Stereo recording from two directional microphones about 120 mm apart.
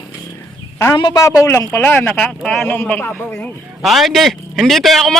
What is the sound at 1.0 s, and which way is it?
Speech, 40° left (ahead or behind).